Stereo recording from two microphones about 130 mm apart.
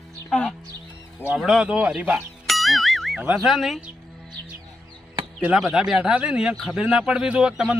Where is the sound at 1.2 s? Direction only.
5° right (ahead or behind).